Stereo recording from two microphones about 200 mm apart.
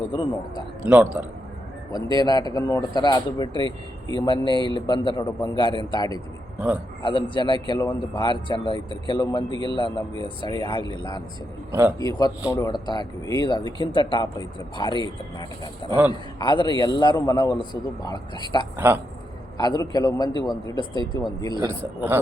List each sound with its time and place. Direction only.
0.1 s speech: 20° left (ahead or behind)
1.9 s speech: 20° left (ahead or behind)
11.7 s speech: 10° right (ahead or behind)
11.9 s speech: 20° left (ahead or behind)
18.8 s speech: 10° right (ahead or behind)
19.5 s speech: 20° left (ahead or behind)
21.8 s speech: 10° right (ahead or behind)